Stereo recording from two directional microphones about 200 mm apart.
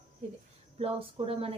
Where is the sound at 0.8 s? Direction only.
30° right (ahead or behind).